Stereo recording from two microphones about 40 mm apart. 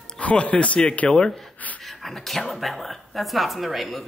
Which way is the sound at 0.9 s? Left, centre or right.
Left.